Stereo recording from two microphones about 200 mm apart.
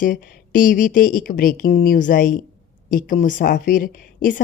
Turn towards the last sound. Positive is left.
turn(degrees=40)  # may be behind; listen again after turning